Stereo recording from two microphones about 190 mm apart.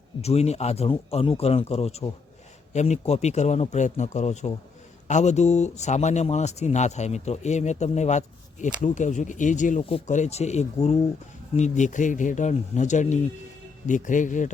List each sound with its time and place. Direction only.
0.2 s speech: 35° left (ahead or behind)